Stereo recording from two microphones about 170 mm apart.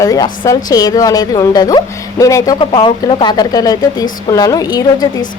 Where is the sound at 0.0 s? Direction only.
20° left (ahead or behind).